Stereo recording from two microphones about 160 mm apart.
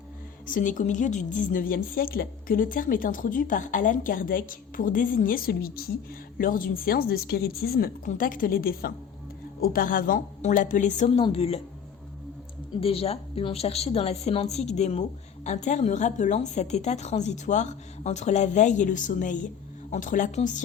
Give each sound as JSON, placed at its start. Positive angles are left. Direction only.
{"t": 0.4, "sound": "a woman's voice", "side_deg": 55}
{"t": 12.8, "sound": "a woman's voice", "side_deg": 35}